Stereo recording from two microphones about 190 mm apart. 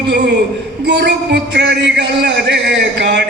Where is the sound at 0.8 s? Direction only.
65° right (ahead or behind).